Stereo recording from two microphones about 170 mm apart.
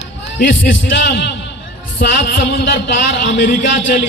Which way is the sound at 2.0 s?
85° left.